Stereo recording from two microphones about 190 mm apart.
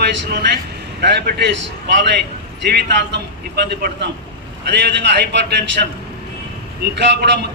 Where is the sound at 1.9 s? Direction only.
65° right (ahead or behind).